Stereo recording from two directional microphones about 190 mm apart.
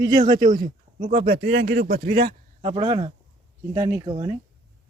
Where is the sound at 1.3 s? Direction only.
60° right (ahead or behind).